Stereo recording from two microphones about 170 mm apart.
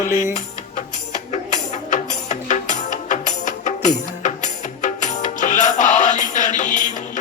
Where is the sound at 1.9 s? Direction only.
45° left (ahead or behind).